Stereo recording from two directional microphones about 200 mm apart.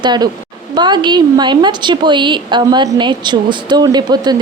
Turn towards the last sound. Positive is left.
turn(degrees=-20)  # may be behind; listen again after turning